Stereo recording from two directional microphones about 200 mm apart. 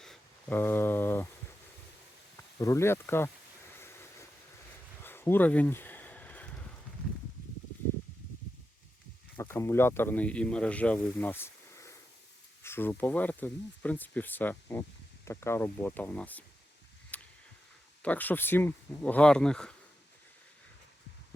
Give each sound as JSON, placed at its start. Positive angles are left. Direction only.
{"t": 0.0, "sound": "speech", "side_deg": 5}
{"t": 2.6, "sound": "speech", "side_deg": 15}
{"t": 3.8, "sound": "vehicle", "side_deg": 10}
{"t": 5.0, "sound": "a sound", "side_deg": 10}
{"t": 9.3, "sound": "speech", "side_deg": 15}
{"t": 17.1, "sound": "a sound", "side_deg": 5}
{"t": 18.0, "sound": "speech", "side_deg": 10}